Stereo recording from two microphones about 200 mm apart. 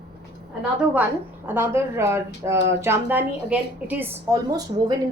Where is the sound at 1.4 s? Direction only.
10° right (ahead or behind).